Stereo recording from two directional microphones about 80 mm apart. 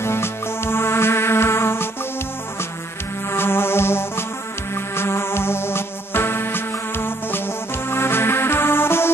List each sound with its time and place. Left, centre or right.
0.0 s music: left
3.3 s music: left